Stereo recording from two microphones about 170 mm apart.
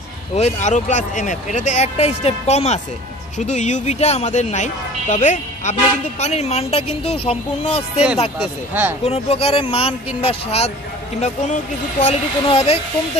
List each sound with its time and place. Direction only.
0.4 s a woman's voice: 45° left (ahead or behind)
8.4 s speech: 10° right (ahead or behind)
9.0 s a woman's voice: 35° left (ahead or behind)